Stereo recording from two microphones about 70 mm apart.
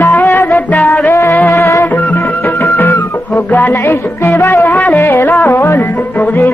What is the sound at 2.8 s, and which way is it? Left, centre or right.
Music, left.